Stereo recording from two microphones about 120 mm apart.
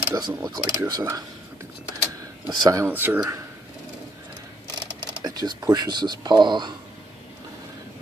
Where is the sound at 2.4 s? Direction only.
30° right (ahead or behind).